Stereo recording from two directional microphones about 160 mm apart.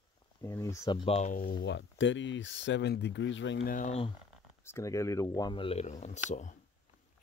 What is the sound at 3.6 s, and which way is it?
Speech, 55° left (ahead or behind).